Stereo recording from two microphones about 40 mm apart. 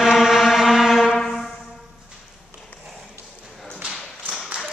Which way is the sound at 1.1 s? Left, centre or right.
Centre.